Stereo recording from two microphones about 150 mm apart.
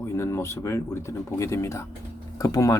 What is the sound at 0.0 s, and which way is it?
Speech, 15° left (ahead or behind).